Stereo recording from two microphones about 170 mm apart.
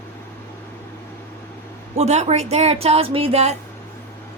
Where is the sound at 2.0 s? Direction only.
40° right (ahead or behind).